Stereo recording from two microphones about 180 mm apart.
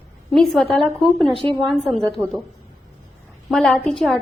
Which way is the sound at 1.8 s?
Centre (ahead or behind).